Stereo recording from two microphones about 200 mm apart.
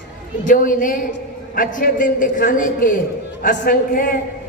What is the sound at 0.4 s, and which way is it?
A man's voice, 45° left (ahead or behind).